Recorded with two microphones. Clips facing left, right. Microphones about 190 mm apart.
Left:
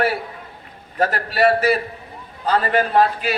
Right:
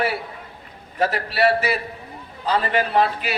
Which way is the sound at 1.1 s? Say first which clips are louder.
Left 3 dB; 45° left (ahead or behind).